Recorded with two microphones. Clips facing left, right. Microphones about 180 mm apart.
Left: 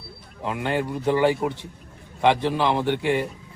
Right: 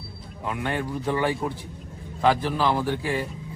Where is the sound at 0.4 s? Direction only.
25° left (ahead or behind).